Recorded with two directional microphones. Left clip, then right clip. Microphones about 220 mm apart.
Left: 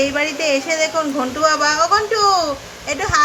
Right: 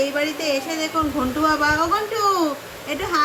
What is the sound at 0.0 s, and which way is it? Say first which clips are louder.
Speech: left 4 dB; 10° left (ahead or behind).